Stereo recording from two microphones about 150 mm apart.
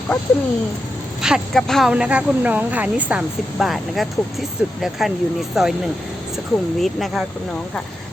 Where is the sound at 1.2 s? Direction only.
Centre (ahead or behind).